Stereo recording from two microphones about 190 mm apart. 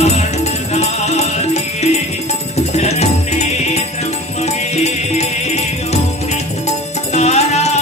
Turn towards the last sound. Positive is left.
turn(degrees=35)  # may be behind; listen again after turning